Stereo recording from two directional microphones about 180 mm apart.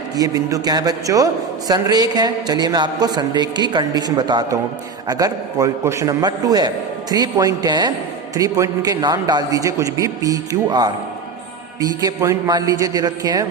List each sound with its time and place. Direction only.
0.2 s a man's voice: 20° right (ahead or behind)